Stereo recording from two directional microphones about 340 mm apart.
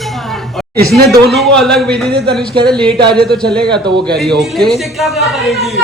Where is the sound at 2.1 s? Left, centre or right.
Right.